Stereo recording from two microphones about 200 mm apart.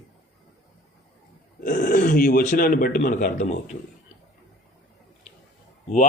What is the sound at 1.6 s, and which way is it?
Speech, 40° left (ahead or behind).